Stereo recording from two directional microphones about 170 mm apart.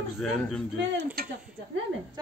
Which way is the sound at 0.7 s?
65° right (ahead or behind).